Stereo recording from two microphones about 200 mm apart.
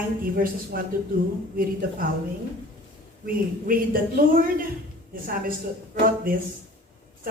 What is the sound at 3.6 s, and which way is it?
Speech, 45° right (ahead or behind).